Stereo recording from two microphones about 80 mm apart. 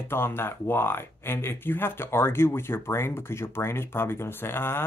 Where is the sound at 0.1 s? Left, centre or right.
Left.